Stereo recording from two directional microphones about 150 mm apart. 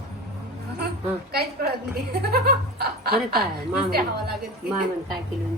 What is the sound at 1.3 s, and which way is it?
A woman's voice, 90° right.